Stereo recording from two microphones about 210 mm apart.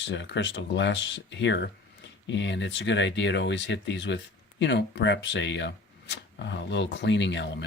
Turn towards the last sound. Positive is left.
turn(degrees=60)  # may be behind; listen again after turning